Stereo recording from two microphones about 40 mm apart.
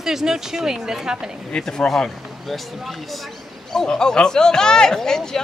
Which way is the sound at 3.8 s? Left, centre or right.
Centre.